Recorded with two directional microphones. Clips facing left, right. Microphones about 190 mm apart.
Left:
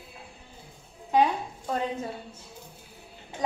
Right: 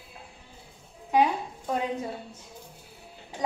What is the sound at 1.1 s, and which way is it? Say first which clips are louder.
Speech: even; 10° right (ahead or behind).